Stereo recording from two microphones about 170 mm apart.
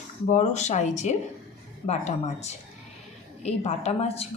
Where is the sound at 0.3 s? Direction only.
45° left (ahead or behind).